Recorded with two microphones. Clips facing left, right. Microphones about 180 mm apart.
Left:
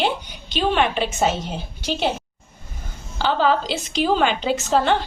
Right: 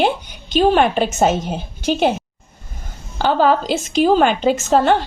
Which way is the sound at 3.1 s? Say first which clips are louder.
Right 4 dB; 50° right (ahead or behind).